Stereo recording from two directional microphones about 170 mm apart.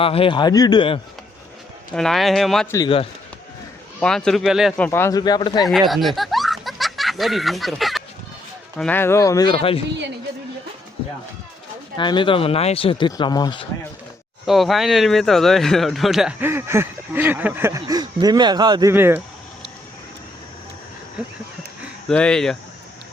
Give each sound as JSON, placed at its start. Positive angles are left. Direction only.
{"t": 0.0, "sound": "speech", "side_deg": 35}
{"t": 1.9, "sound": "speech", "side_deg": 5}
{"t": 4.0, "sound": "speech", "side_deg": 5}
{"t": 4.9, "sound": "speech", "side_deg": 15}
{"t": 5.9, "sound": "snicker", "side_deg": 0}
{"t": 8.8, "sound": "speech", "side_deg": 10}
{"t": 11.9, "sound": "speech", "side_deg": 30}
{"t": 14.4, "sound": "speech", "side_deg": 0}
{"t": 16.4, "sound": "a sound", "side_deg": -15}
{"t": 22.1, "sound": "speech", "side_deg": 5}